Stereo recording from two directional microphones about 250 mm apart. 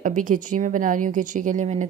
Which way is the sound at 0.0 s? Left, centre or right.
Right.